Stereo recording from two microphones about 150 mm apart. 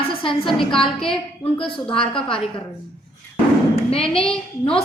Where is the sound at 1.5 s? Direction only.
35° left (ahead or behind).